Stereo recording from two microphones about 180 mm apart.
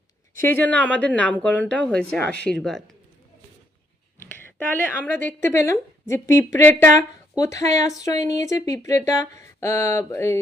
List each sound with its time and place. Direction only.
0.3 s speech: 10° left (ahead or behind)
4.2 s a woman's voice: 10° left (ahead or behind)
6.6 s speech: 10° left (ahead or behind)